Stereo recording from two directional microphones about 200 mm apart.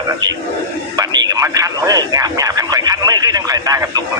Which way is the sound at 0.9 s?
20° right (ahead or behind).